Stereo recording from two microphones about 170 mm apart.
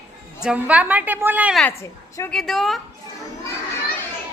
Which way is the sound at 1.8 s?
15° left (ahead or behind).